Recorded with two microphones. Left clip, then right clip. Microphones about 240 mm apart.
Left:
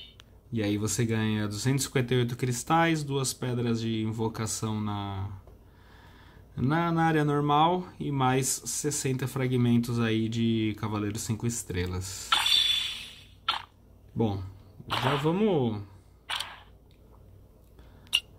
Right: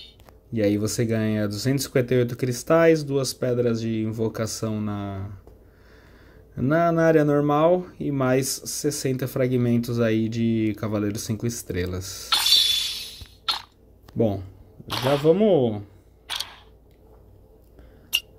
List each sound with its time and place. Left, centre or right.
0.6 s speech: centre
6.5 s speech: centre
16.3 s single-lens reflex camera: centre
18.1 s a sound: centre